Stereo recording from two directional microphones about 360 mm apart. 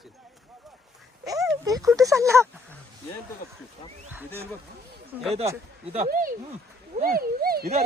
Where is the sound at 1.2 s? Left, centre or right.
Centre.